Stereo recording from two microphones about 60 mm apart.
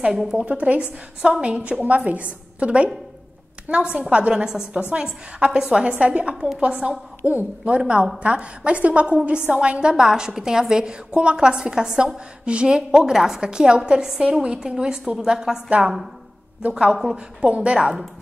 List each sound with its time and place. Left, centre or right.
0.3 s a woman's voice: centre
6.3 s a woman's voice: centre
6.6 s a woman's voice: centre
16.7 s a woman's voice: centre
17.7 s a woman's voice: centre